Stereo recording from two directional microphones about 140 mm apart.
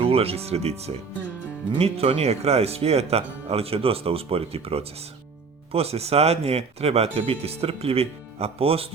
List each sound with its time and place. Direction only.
0.0 s speech: 45° right (ahead or behind)